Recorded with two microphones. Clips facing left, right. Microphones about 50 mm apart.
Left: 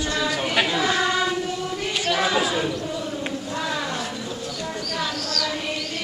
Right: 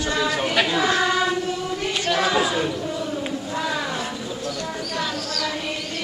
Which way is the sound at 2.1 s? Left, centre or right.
Centre.